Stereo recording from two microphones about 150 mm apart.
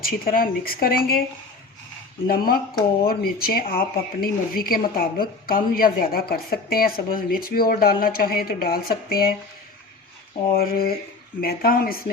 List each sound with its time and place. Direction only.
0.0 s speech: 75° left (ahead or behind)
2.2 s speech: 80° left
10.5 s speech: 90° left